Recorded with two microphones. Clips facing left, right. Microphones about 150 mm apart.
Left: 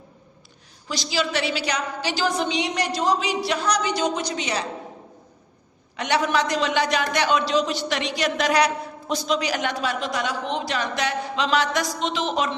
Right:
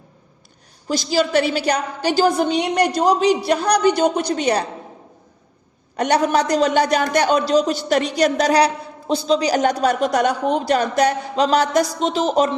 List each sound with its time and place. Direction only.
0.9 s a woman's voice: 45° right (ahead or behind)
6.0 s a man's voice: 40° right (ahead or behind)
10.1 s a man's voice: 55° right (ahead or behind); by 12.5 s 40° right (ahead or behind)